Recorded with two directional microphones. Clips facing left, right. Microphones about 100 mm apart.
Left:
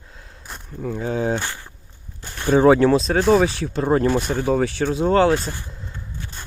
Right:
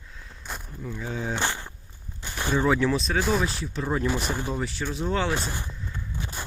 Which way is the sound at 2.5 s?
65° left (ahead or behind).